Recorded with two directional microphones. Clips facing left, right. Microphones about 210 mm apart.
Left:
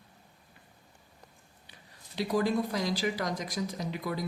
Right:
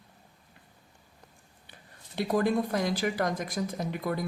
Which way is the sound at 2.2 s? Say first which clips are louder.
Right 2 dB; 50° right (ahead or behind).